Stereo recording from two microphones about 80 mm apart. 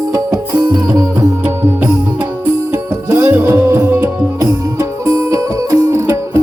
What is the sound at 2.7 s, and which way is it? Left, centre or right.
Music, right.